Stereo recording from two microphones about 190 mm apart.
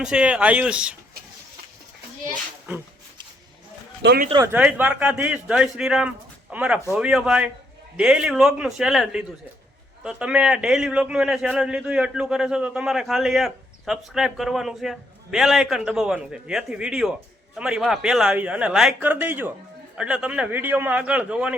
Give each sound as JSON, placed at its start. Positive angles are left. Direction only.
{"t": 0.0, "sound": "a man's voice", "side_deg": -5}
{"t": 4.0, "sound": "speech", "side_deg": -55}
{"t": 4.4, "sound": "a man's voice", "side_deg": -10}